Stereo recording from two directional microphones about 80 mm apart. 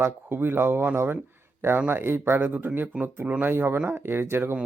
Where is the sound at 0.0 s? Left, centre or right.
Right.